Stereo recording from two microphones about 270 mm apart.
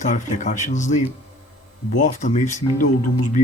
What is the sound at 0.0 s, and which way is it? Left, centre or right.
Speech, left.